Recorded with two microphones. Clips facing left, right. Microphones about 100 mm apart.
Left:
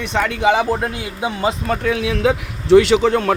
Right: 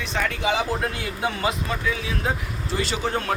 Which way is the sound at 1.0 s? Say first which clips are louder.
Left 4 dB; 15° left (ahead or behind).